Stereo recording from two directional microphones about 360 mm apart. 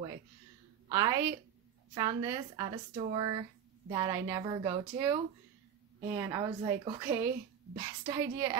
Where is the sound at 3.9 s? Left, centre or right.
Centre.